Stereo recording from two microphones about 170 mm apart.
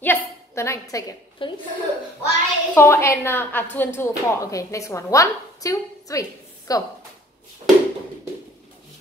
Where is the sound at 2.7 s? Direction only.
15° left (ahead or behind).